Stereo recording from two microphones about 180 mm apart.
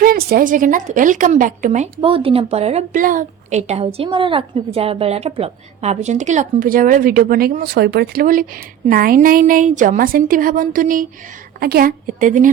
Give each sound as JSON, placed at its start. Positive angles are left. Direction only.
{"t": 0.0, "sound": "speech", "side_deg": -55}